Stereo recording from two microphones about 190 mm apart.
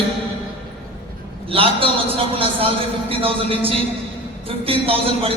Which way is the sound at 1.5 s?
30° right (ahead or behind).